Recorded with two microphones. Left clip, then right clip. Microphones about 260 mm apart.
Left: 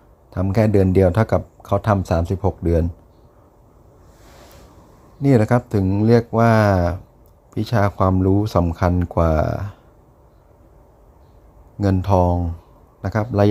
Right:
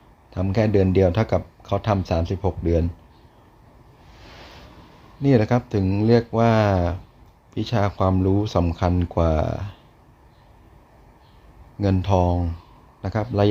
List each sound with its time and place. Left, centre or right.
0.3 s speech: centre
5.2 s speech: centre
11.8 s speech: centre